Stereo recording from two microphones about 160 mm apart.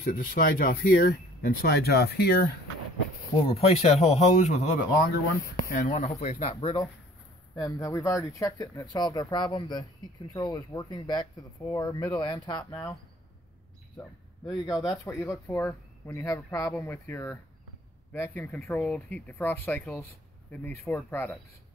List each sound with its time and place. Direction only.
0.0 s speech: 60° left (ahead or behind); by 2.3 s 80° left
3.3 s a man's voice: 35° left (ahead or behind)
13.9 s a sound: 25° left (ahead or behind)
14.7 s speech: centre (ahead or behind)
15.0 s speech: 20° left (ahead or behind)